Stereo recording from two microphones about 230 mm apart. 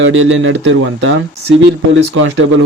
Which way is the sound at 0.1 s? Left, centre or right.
Right.